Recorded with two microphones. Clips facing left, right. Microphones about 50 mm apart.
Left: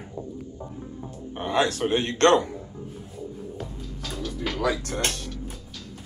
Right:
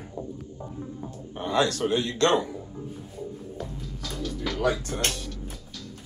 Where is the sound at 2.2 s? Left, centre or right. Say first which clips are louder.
Left 5 dB; left.